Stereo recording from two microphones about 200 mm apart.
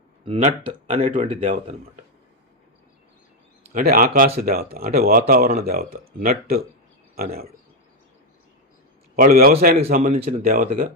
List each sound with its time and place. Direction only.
0.3 s speech: 30° right (ahead or behind)
3.7 s speech: 45° right (ahead or behind)
9.1 s speech: 45° right (ahead or behind)
9.9 s speech: 35° right (ahead or behind)
10.4 s speech: 45° right (ahead or behind)